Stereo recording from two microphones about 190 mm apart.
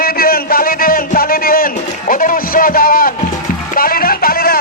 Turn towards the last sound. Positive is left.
turn(degrees=50)  # may be behind; listen again after turning